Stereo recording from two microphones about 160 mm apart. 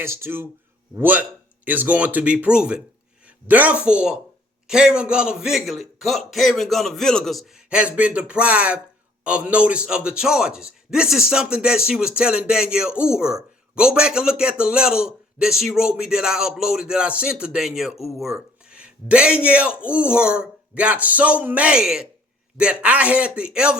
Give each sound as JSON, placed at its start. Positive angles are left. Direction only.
{"t": 0.0, "sound": "speech", "side_deg": -15}